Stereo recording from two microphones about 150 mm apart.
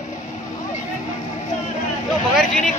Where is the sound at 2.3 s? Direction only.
5° left (ahead or behind).